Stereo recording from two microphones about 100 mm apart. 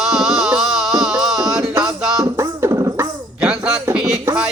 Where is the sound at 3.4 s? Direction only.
5° right (ahead or behind).